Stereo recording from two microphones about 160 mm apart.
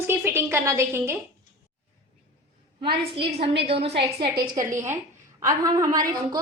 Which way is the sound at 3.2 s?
40° right (ahead or behind).